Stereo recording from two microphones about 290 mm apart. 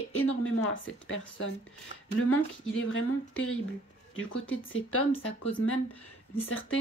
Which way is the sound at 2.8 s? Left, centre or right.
Left.